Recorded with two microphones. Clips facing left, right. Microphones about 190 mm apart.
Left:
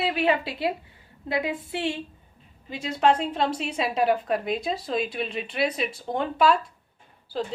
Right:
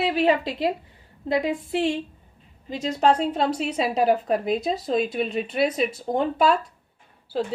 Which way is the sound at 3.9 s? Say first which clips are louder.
Right 2 dB; 35° right (ahead or behind).